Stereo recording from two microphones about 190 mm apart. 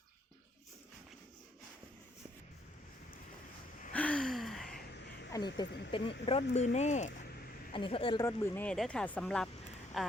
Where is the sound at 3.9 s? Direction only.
5° left (ahead or behind).